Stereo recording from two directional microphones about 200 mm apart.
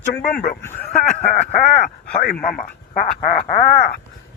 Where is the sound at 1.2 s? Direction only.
35° left (ahead or behind).